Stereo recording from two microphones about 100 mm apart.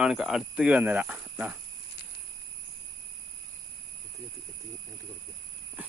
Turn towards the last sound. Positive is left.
turn(degrees=-15)  # may be behind; listen again after turning